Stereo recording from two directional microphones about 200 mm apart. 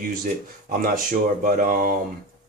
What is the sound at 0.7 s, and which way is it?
A man's voice, 45° right (ahead or behind).